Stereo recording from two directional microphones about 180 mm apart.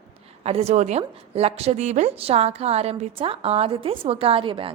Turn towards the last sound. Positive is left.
turn(degrees=-30)  # may be behind; listen again after turning